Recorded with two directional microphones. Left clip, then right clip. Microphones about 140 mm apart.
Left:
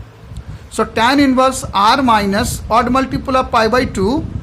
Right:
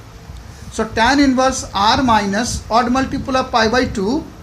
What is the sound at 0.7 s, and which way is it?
A woman's voice, 65° left (ahead or behind).